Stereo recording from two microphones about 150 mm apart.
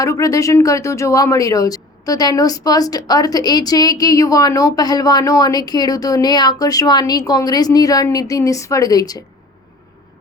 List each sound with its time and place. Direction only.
0.0 s speech: 20° left (ahead or behind)